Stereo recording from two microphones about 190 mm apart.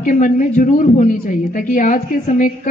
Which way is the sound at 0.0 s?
45° left (ahead or behind).